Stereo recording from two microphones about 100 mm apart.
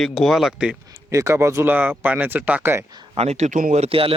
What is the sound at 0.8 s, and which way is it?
Speech, 30° right (ahead or behind).